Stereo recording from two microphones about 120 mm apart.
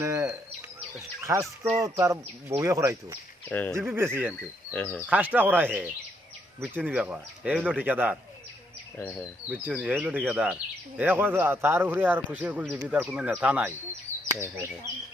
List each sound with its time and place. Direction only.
0.0 s bird: 25° right (ahead or behind)
1.2 s speech: 25° right (ahead or behind)
3.5 s speech: 15° left (ahead or behind)
3.8 s speech: 20° right (ahead or behind)
4.7 s speech: 15° left (ahead or behind)
5.0 s speech: 10° right (ahead or behind)
9.0 s speech: 20° left (ahead or behind)
9.5 s speech: 10° right (ahead or behind)